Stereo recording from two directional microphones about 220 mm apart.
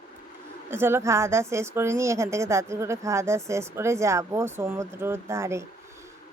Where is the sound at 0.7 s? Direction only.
10° right (ahead or behind).